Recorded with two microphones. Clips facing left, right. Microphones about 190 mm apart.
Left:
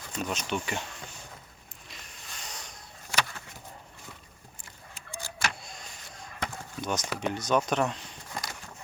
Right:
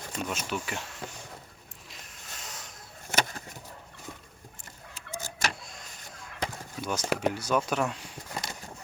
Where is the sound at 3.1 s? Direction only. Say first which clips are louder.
Right 2 dB; 40° right (ahead or behind).